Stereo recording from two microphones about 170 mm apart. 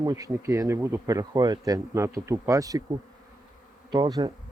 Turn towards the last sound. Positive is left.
turn(degrees=-25)  # may be behind; listen again after turning